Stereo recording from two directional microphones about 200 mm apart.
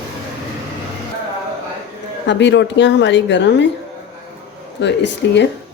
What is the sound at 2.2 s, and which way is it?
Speech, 60° left (ahead or behind).